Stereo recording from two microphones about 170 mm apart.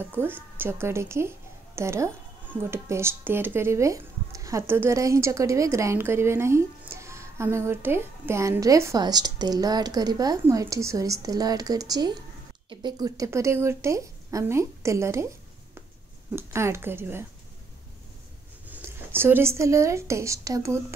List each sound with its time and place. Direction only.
0.0 s speech: 10° right (ahead or behind)
16.3 s speech: 15° right (ahead or behind)
18.7 s speech: 15° right (ahead or behind)